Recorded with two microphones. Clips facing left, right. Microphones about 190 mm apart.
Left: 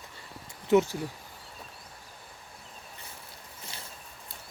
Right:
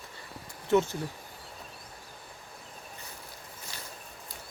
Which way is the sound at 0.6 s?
15° left (ahead or behind).